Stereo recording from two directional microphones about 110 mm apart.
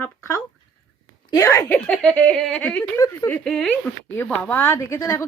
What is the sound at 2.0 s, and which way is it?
Speech, 10° left (ahead or behind).